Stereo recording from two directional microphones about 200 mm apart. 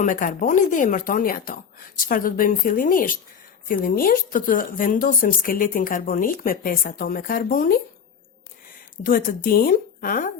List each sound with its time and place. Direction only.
0.0 s a woman's voice: 40° left (ahead or behind)
9.0 s a woman's voice: 45° left (ahead or behind)